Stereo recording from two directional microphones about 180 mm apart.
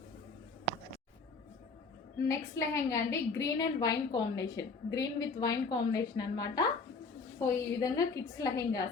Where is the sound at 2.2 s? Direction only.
15° left (ahead or behind).